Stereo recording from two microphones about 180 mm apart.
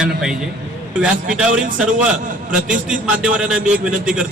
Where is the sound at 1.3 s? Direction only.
5° right (ahead or behind).